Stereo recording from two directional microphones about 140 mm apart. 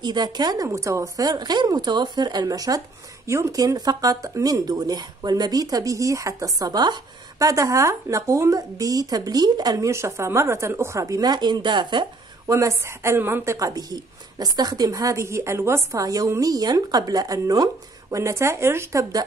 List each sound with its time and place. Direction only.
0.0 s speech: 30° right (ahead or behind)
12.5 s speech: 20° right (ahead or behind)